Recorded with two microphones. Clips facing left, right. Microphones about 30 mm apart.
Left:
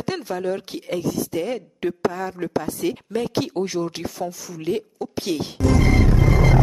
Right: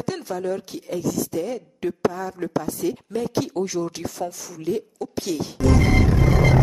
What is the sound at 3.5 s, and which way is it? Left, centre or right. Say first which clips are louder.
Speech: left 1 dB; left.